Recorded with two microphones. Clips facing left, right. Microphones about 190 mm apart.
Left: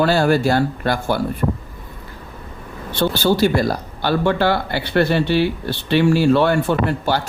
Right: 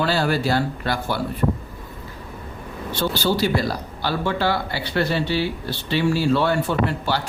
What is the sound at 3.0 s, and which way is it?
Speech, 50° left (ahead or behind).